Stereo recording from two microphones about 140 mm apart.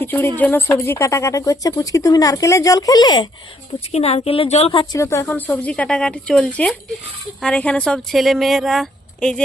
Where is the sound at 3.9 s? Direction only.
50° left (ahead or behind).